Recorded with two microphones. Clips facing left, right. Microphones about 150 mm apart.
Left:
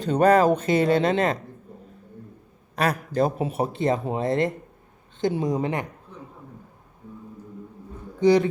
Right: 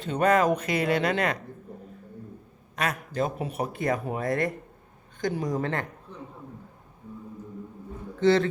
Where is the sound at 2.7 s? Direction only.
35° left (ahead or behind).